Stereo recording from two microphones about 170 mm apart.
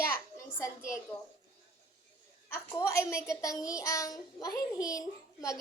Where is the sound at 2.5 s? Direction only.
15° left (ahead or behind).